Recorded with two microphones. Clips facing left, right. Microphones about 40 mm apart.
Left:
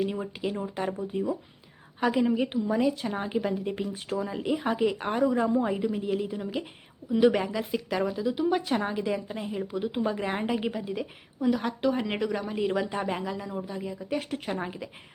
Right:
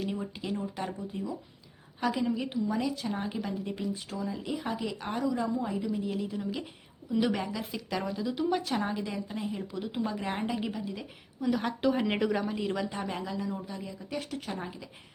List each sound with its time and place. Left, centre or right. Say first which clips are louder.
0.0 s speech: left 5 dB; centre
4.1 s a woman's voice: left 6 dB; left; by 11.5 s centre
11.5 s a woman's voice: left 1 dB; centre
12.5 s speech: left 5 dB; centre; by 14.8 s left